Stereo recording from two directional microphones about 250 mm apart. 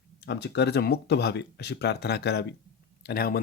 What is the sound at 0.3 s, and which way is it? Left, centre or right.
Speech, left.